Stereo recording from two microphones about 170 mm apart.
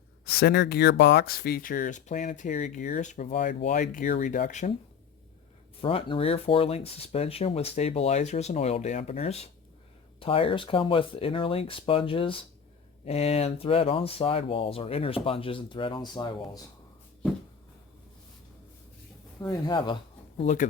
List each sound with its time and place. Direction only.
0.3 s speech: 80° left; by 4.7 s 50° left (ahead or behind)
5.8 s speech: 35° left (ahead or behind)
19.4 s speech: 25° left (ahead or behind)
20.4 s speech: 45° left (ahead or behind)